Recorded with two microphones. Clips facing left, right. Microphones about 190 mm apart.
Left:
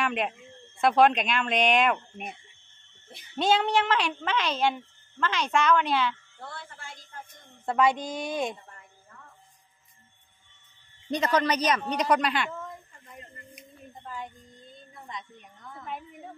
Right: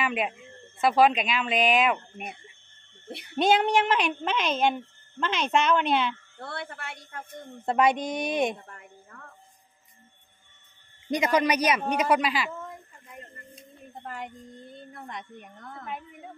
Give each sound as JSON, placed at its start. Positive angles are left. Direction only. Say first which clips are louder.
{"t": 0.0, "sound": "speech", "louder": "even", "side_deg": -5}
{"t": 3.3, "sound": "a child's voice", "louder": "right 2 dB", "side_deg": -15}
{"t": 6.4, "sound": "a woman's voice", "louder": "right 6 dB", "side_deg": -70}
{"t": 7.6, "sound": "speech", "louder": "right 1 dB", "side_deg": -20}
{"t": 9.1, "sound": "music", "louder": "right 3 dB", "side_deg": -60}
{"t": 11.1, "sound": "a child's voice", "louder": "right 2 dB", "side_deg": -10}
{"t": 11.9, "sound": "a sound", "louder": "right 1 dB", "side_deg": -5}
{"t": 14.0, "sound": "a woman's voice", "louder": "right 2 dB", "side_deg": -70}